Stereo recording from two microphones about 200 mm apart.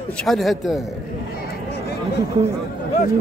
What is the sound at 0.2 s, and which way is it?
Speech, centre (ahead or behind).